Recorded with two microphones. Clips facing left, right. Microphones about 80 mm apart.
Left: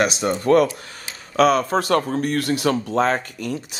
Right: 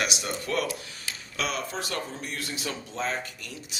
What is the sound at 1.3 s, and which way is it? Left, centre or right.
Speech, left.